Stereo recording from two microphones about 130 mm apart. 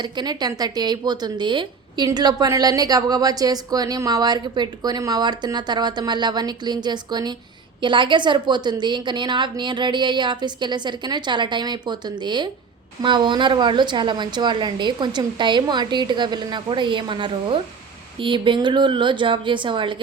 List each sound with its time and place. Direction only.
0.0 s a woman's voice: 35° right (ahead or behind)